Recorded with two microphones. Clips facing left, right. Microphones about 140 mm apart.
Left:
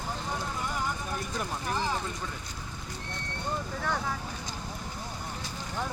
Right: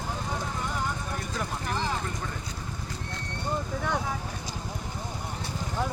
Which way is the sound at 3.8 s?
15° right (ahead or behind).